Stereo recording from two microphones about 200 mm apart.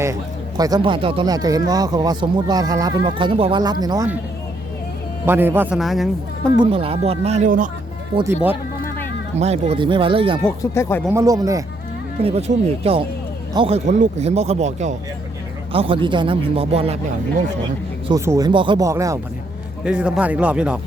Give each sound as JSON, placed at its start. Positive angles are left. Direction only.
{"t": 0.0, "sound": "speech", "side_deg": -15}
{"t": 5.2, "sound": "a man's voice", "side_deg": -10}
{"t": 6.7, "sound": "speech", "side_deg": -30}
{"t": 8.3, "sound": "a man's voice", "side_deg": -10}
{"t": 9.4, "sound": "speech", "side_deg": -30}
{"t": 10.6, "sound": "speech", "side_deg": 15}
{"t": 11.1, "sound": "a man's voice", "side_deg": -15}
{"t": 12.2, "sound": "speech", "side_deg": -30}
{"t": 18.1, "sound": "a man's voice", "side_deg": -20}